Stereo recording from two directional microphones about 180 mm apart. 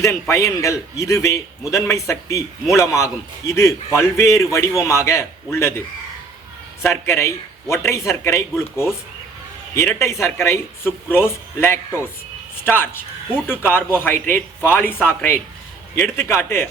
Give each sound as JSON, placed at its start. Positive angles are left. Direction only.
{"t": 0.0, "sound": "a man's voice", "side_deg": 15}
{"t": 6.8, "sound": "a man's voice", "side_deg": 10}
{"t": 12.6, "sound": "a man's voice", "side_deg": 10}